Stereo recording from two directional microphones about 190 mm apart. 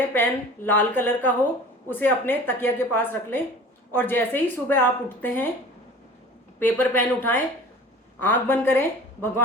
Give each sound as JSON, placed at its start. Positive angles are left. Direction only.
{"t": 0.1, "sound": "speech", "side_deg": 10}
{"t": 6.6, "sound": "speech", "side_deg": 10}